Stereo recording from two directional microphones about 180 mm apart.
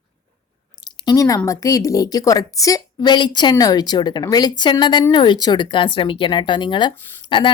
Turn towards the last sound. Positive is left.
turn(degrees=25)  # may be behind; listen again after turning